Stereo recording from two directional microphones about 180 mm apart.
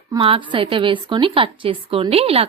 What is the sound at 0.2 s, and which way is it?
A woman's voice, 30° right (ahead or behind).